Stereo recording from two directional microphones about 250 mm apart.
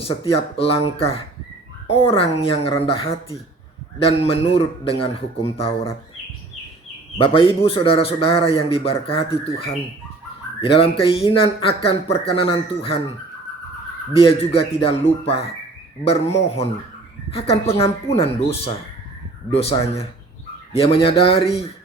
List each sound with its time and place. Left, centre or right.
0.2 s a man's voice: left
7.2 s a man's voice: left
14.1 s a man's voice: left
20.7 s a man's voice: left